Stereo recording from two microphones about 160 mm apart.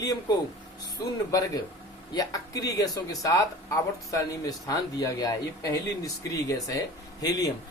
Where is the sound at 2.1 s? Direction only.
25° left (ahead or behind).